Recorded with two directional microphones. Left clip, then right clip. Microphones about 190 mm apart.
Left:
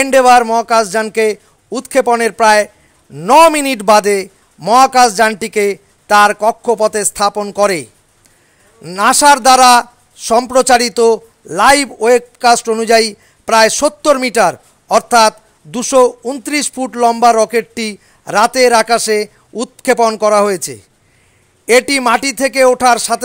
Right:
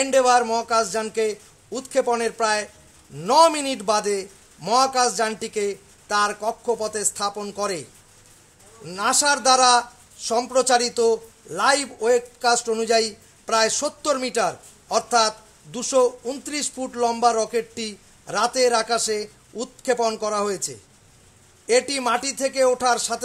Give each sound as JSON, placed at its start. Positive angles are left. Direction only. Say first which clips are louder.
{"t": 0.0, "sound": "a man's voice", "louder": "left 10 dB", "side_deg": 40}